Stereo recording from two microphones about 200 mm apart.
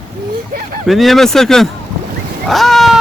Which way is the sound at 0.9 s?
Centre (ahead or behind).